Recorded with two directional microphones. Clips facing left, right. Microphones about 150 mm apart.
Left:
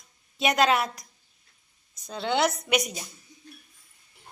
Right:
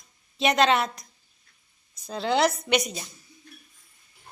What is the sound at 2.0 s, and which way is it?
A woman's voice, centre (ahead or behind).